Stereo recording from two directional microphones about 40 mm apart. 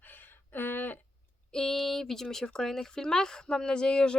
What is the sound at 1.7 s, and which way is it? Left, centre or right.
A woman's voice, centre.